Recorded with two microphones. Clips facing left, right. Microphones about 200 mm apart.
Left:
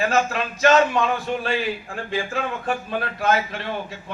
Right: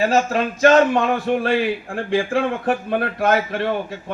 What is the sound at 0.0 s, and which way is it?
A man's voice, 40° right (ahead or behind).